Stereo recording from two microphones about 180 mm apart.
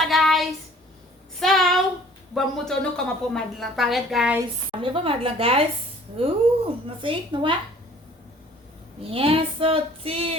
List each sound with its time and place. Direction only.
0.0 s child singing: centre (ahead or behind)
1.4 s a sound: centre (ahead or behind)
2.3 s a woman's voice: 5° left (ahead or behind)
4.8 s child singing: 30° right (ahead or behind)
6.8 s a woman's voice: 30° right (ahead or behind)
9.0 s child singing: 30° right (ahead or behind)